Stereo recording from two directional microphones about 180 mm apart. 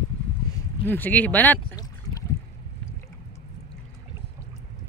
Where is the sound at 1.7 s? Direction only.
20° left (ahead or behind).